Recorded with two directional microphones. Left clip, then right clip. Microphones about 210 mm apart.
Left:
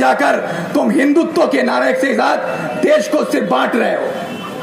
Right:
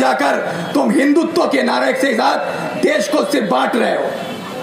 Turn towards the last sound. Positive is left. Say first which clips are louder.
# left 1 dB
turn(degrees=45)  # may be behind; listen again after turning